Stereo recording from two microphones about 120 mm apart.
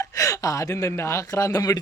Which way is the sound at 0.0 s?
25° left (ahead or behind).